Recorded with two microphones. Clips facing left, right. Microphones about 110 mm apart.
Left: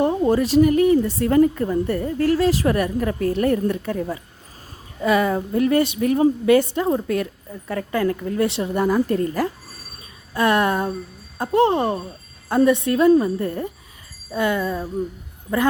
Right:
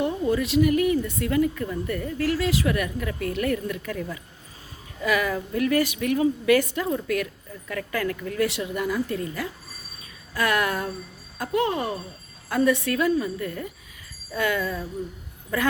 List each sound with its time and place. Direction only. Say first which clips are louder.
0.0 s a woman's voice: left 6 dB; 40° left (ahead or behind)
10.3 s a woman's voice: left 6 dB; 30° left (ahead or behind)